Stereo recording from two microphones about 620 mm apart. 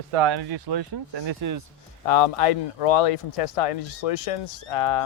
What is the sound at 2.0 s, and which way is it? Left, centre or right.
Speech, left.